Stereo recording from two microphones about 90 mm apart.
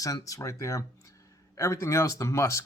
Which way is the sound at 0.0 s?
40° left (ahead or behind).